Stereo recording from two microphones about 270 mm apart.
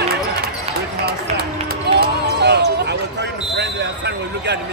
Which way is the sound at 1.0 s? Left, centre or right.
Right.